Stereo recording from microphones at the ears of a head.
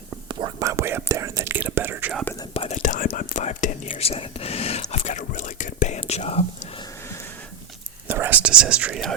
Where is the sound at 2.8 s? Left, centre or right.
Left.